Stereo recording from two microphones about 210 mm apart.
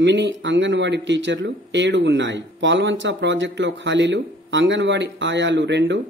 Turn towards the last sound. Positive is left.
turn(degrees=-55)  # may be behind; listen again after turning